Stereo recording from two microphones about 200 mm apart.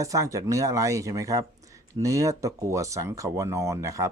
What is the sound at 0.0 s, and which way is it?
Speech, 15° right (ahead or behind).